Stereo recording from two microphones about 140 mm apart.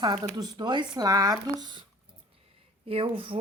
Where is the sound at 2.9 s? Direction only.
40° right (ahead or behind).